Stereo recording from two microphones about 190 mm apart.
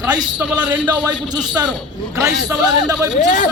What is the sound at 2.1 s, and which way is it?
Speech, 20° right (ahead or behind).